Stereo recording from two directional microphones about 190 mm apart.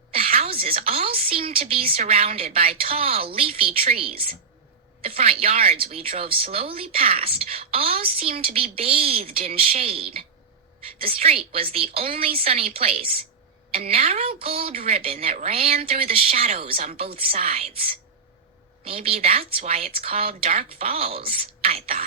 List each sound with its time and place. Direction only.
0.1 s speech: 30° right (ahead or behind)
18.9 s speech: 30° right (ahead or behind)